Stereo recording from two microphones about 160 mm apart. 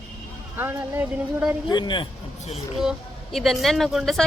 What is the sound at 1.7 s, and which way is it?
Speech, 30° left (ahead or behind).